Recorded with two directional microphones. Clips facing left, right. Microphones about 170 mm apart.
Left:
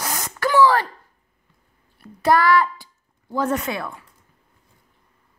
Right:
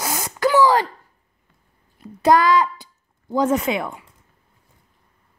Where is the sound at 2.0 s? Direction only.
15° right (ahead or behind).